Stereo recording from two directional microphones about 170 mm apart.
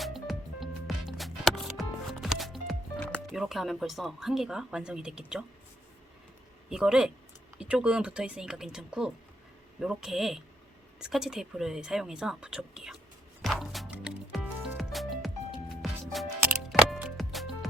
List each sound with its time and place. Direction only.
0.0 s music: centre (ahead or behind)
6.7 s speech: 5° right (ahead or behind)
13.4 s music: centre (ahead or behind)